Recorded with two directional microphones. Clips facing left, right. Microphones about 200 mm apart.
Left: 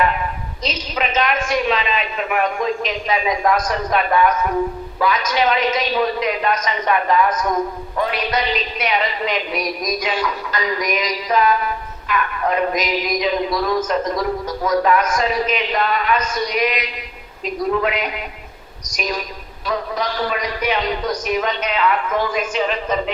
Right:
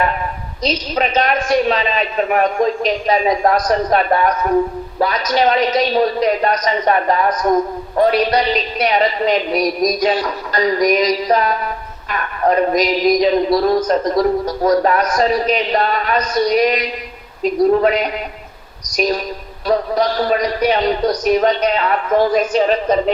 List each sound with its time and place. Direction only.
0.6 s a man's voice: 40° right (ahead or behind)